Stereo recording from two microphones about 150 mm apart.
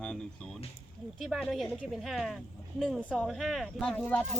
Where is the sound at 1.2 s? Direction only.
Centre (ahead or behind).